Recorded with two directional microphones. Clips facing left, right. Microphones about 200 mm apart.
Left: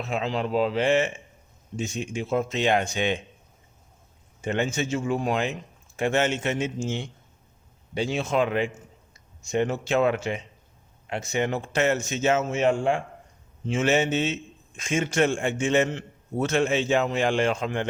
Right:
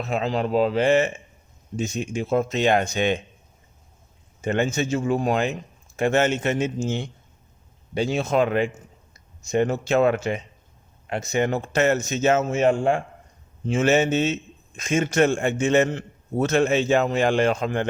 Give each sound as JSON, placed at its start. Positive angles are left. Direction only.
{"t": 0.0, "sound": "a man's voice", "side_deg": -40}
{"t": 4.4, "sound": "a man's voice", "side_deg": -45}